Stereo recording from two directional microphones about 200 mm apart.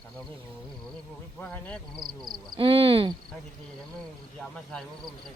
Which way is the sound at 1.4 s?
10° left (ahead or behind).